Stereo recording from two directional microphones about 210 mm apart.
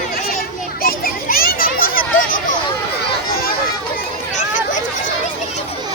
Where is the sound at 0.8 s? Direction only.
45° left (ahead or behind).